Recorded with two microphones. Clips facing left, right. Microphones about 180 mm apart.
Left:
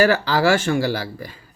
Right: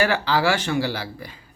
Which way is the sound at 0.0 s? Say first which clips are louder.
Left 4 dB; 40° left (ahead or behind).